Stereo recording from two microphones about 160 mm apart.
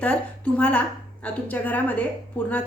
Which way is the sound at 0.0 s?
10° left (ahead or behind).